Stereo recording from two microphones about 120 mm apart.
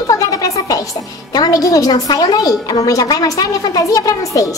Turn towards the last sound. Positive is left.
turn(degrees=30)  # may be behind; listen again after turning